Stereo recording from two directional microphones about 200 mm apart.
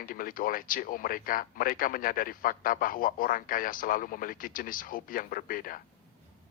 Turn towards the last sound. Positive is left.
turn(degrees=45)  # may be behind; listen again after turning